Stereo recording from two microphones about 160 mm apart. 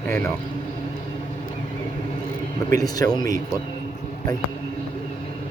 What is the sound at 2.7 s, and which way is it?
Speech, 20° left (ahead or behind).